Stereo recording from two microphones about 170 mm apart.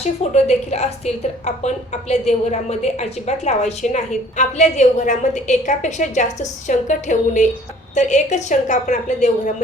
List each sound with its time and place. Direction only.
0.0 s a woman's voice: 40° left (ahead or behind)